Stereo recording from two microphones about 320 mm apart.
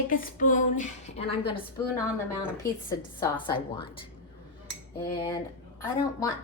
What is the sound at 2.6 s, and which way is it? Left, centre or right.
A woman's voice, centre.